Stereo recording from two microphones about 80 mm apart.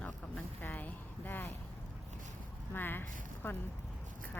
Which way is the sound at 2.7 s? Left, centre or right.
Left.